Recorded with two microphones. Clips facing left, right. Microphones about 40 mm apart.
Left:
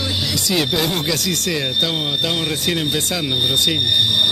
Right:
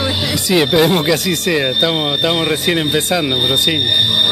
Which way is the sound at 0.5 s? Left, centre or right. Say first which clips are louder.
Right 8 dB; right.